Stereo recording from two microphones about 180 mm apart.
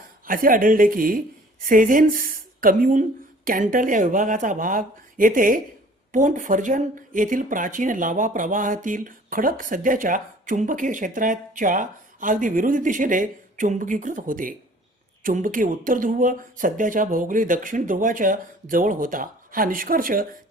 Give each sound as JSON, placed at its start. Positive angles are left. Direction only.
{"t": 0.3, "sound": "speech", "side_deg": -50}